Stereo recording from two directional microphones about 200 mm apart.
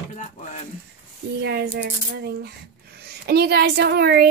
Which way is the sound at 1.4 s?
55° right (ahead or behind).